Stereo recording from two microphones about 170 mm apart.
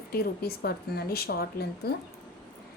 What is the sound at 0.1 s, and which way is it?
A woman's voice, 65° left (ahead or behind).